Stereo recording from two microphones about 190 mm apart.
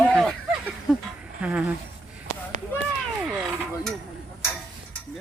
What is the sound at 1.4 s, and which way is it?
Speech, 5° right (ahead or behind).